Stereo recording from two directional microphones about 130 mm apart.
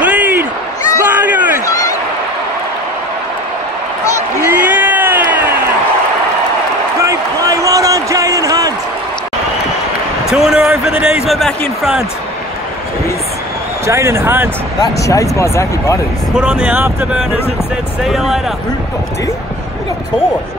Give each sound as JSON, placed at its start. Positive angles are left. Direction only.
{"t": 0.0, "sound": "applause", "side_deg": -10}
{"t": 1.0, "sound": "a sound", "side_deg": -15}
{"t": 4.4, "sound": "crowd", "side_deg": -15}
{"t": 7.0, "sound": "a sound", "side_deg": -25}
{"t": 10.2, "sound": "a sound", "side_deg": -5}
{"t": 13.8, "sound": "speech", "side_deg": -20}
{"t": 14.8, "sound": "speech", "side_deg": 25}
{"t": 16.3, "sound": "speech", "side_deg": -5}
{"t": 18.0, "sound": "speech", "side_deg": 0}